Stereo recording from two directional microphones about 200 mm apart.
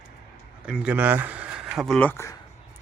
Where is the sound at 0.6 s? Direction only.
5° right (ahead or behind).